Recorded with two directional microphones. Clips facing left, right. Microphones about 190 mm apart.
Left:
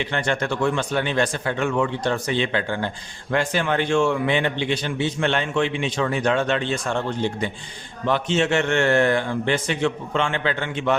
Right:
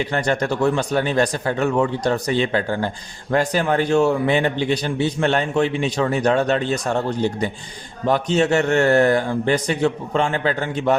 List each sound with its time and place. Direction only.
0.0 s a man's voice: 40° right (ahead or behind)